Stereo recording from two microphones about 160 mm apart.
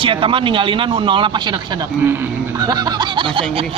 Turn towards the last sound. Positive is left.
turn(degrees=-30)  # may be behind; listen again after turning